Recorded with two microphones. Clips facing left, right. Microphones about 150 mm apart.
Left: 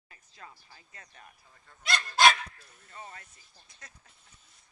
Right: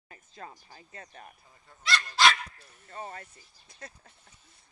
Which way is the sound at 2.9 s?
40° right (ahead or behind).